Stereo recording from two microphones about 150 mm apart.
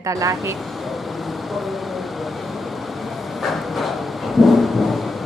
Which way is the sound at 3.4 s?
Centre (ahead or behind).